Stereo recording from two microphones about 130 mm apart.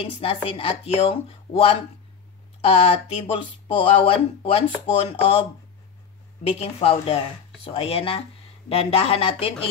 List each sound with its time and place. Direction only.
0.0 s speech: 45° left (ahead or behind)
6.6 s speech: 50° left (ahead or behind)